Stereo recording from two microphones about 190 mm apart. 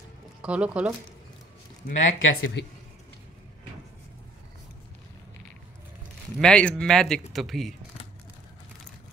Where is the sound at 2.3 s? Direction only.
75° left (ahead or behind).